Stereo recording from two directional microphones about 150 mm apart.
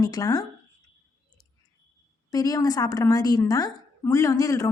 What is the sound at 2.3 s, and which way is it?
A woman's voice, 25° left (ahead or behind).